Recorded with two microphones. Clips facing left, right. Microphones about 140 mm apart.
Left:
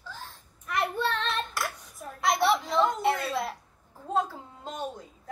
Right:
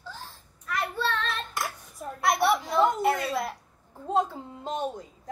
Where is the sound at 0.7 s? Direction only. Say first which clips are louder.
Left 1 dB; 20° left (ahead or behind).